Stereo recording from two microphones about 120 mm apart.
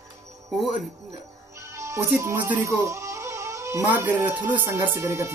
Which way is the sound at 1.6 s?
25° right (ahead or behind).